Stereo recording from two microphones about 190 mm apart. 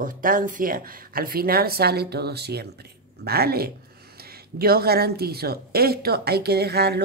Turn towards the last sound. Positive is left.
turn(degrees=-55)  # may be behind; listen again after turning